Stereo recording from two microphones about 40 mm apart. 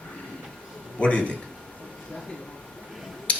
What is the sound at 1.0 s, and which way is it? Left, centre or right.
Speech, left.